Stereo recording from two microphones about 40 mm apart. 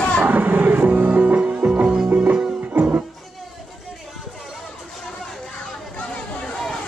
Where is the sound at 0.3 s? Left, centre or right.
Right.